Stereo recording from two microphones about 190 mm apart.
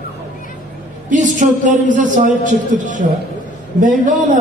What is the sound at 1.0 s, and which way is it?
A man's voice, 40° right (ahead or behind).